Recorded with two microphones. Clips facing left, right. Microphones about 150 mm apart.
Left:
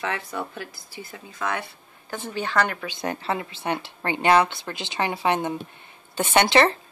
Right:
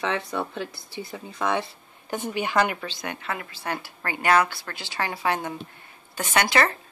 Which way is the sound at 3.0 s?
30° left (ahead or behind).